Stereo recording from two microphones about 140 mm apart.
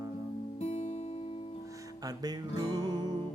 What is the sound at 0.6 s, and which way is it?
Music, 45° left (ahead or behind).